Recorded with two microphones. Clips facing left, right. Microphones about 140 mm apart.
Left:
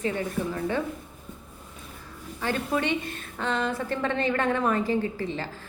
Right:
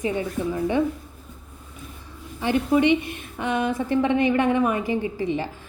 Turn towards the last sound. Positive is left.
turn(degrees=-15)  # may be behind; listen again after turning